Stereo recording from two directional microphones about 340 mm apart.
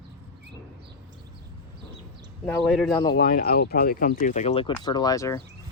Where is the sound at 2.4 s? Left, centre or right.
Centre.